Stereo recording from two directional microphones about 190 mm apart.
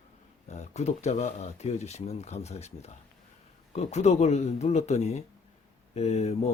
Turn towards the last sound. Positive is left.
turn(degrees=35)  # may be behind; listen again after turning